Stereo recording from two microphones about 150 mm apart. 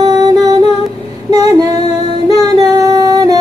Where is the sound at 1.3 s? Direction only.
25° right (ahead or behind).